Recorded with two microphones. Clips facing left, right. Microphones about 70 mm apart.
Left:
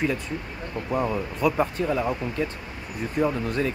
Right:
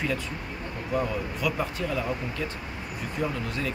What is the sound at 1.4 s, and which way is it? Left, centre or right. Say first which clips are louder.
Speech: left 7 dB; left.